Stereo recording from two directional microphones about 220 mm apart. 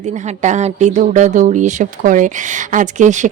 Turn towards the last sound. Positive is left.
turn(degrees=-35)  # may be behind; listen again after turning